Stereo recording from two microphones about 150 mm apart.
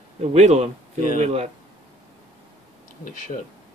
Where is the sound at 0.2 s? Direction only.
45° right (ahead or behind).